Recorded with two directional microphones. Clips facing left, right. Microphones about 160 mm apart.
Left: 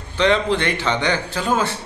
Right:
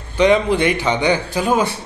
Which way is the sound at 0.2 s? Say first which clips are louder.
Right 4 dB; 10° right (ahead or behind).